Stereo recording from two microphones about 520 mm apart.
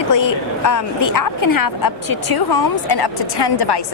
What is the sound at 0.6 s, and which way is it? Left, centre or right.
A woman's voice, left.